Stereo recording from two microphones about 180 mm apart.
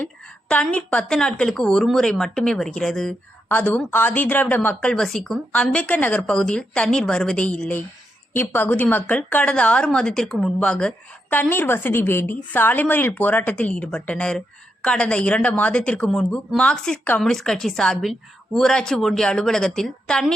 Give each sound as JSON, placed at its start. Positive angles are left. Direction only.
{"t": 0.5, "sound": "a woman's voice", "side_deg": 5}